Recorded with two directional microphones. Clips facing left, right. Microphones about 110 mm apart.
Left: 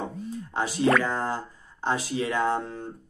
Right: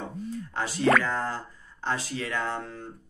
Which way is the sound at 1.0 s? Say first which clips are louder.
Left 2 dB; 20° left (ahead or behind).